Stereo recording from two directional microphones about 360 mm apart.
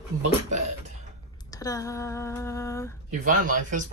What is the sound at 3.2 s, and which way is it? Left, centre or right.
Speech, right.